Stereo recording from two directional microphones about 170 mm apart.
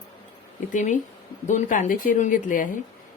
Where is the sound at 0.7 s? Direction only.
45° left (ahead or behind).